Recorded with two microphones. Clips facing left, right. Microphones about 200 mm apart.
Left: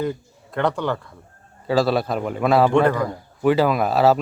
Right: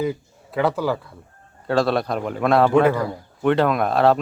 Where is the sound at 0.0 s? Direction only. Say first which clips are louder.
Right 1 dB; 5° right (ahead or behind).